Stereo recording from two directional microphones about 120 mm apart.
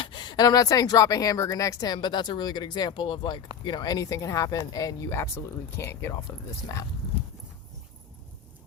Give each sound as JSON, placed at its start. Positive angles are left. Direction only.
{"t": 0.0, "sound": "speech", "side_deg": 40}